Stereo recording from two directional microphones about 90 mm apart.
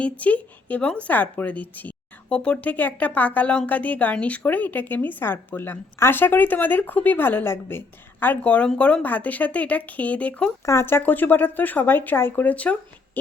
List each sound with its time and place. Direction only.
0.0 s a woman's voice: 15° left (ahead or behind)
10.7 s a woman's voice: 30° left (ahead or behind)